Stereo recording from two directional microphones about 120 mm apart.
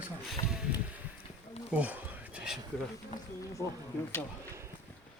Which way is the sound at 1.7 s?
10° right (ahead or behind).